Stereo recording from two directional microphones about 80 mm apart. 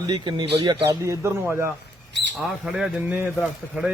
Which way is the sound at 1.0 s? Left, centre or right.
Right.